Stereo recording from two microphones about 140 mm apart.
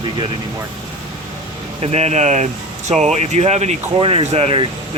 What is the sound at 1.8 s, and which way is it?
Speech, 50° right (ahead or behind).